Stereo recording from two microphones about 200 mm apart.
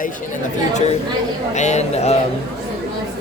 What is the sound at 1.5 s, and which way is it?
Speech, 35° left (ahead or behind).